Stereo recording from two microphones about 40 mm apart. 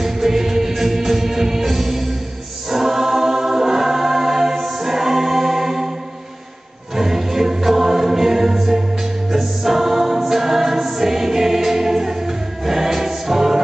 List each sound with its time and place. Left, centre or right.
0.0 s music: centre
2.7 s choir: centre
7.0 s music: centre